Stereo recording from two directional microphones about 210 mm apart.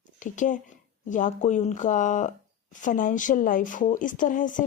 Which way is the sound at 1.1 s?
35° left (ahead or behind).